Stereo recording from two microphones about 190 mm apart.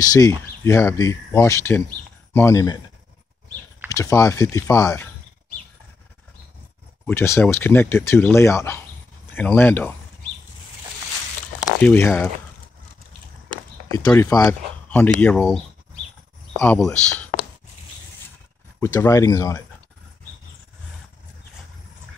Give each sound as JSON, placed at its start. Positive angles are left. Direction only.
{"t": 0.0, "sound": "speech", "side_deg": 20}
{"t": 3.9, "sound": "speech", "side_deg": 15}
{"t": 7.1, "sound": "speech", "side_deg": 10}
{"t": 11.8, "sound": "speech", "side_deg": 10}
{"t": 13.8, "sound": "speech", "side_deg": 20}
{"t": 18.8, "sound": "speech", "side_deg": 15}